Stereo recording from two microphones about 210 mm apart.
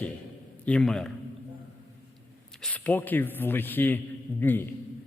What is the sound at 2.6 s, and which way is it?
Speech, 5° left (ahead or behind).